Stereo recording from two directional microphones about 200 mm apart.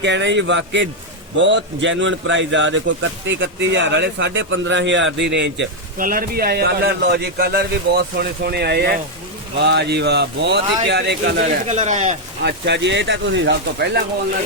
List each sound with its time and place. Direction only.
0.0 s a man's voice: 60° right (ahead or behind)
6.0 s a man's voice: 45° right (ahead or behind)
11.7 s speech: 35° right (ahead or behind)
12.4 s speech: 60° right (ahead or behind)